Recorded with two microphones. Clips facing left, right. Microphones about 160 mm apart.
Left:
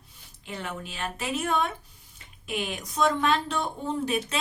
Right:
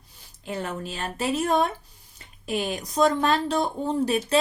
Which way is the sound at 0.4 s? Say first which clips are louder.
Right 5 dB; 40° right (ahead or behind).